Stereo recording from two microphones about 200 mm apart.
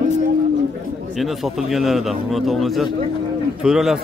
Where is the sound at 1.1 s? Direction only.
Centre (ahead or behind).